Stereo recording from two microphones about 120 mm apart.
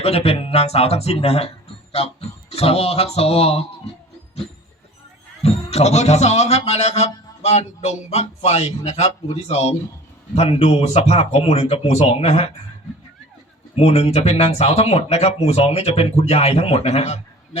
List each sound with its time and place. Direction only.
0.0 s speech: 55° left (ahead or behind)
2.6 s speech: 55° left (ahead or behind)
5.4 s speech: 65° left (ahead or behind)
13.7 s speech: 60° left (ahead or behind)